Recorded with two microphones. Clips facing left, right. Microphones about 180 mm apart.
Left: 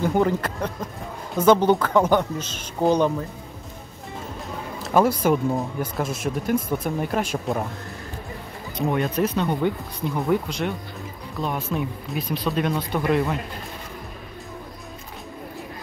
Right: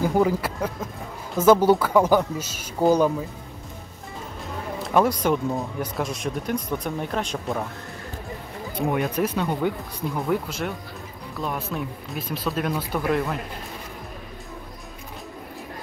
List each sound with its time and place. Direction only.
0.0 s speech: 5° right (ahead or behind)
4.9 s speech: 5° left (ahead or behind)
8.7 s speech: 10° right (ahead or behind)